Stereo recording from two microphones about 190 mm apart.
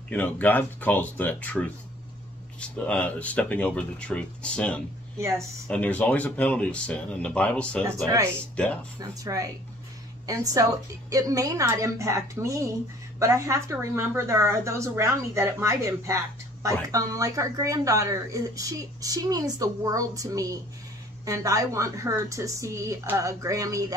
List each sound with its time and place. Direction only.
0.1 s speech: 10° left (ahead or behind)
7.8 s speech: 20° right (ahead or behind)
8.6 s speech: 5° left (ahead or behind)
9.0 s speech: 15° right (ahead or behind)